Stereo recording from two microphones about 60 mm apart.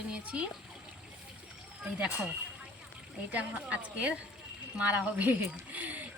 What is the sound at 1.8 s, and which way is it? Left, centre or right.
Speech, right.